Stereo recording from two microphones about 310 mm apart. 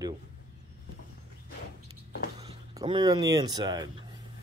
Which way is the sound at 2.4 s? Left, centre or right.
Centre.